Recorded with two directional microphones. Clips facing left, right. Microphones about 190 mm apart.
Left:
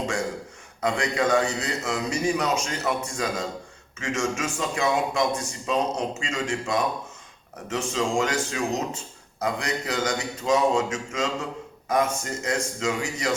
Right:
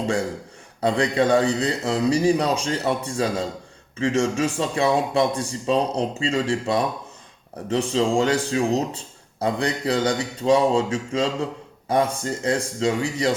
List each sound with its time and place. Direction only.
0.8 s speech: 35° right (ahead or behind)